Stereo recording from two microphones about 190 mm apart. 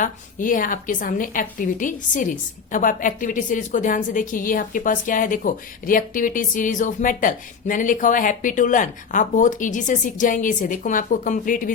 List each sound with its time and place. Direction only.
0.0 s a woman's voice: 45° left (ahead or behind)